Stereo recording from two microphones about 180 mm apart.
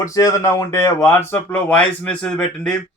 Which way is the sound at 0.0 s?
20° left (ahead or behind).